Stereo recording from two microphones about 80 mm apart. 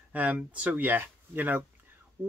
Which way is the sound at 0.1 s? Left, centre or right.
Centre.